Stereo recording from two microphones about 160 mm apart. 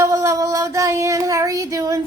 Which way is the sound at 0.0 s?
20° right (ahead or behind).